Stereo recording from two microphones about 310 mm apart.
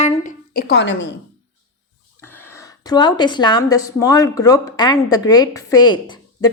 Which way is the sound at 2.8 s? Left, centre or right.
Centre.